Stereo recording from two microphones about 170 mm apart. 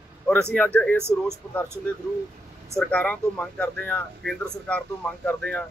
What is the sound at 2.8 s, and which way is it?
Speech, 10° left (ahead or behind).